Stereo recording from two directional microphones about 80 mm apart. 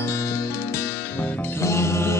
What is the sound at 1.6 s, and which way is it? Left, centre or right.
Music, left.